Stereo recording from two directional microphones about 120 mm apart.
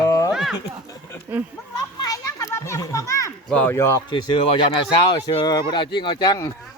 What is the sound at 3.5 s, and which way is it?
Speech, 10° left (ahead or behind).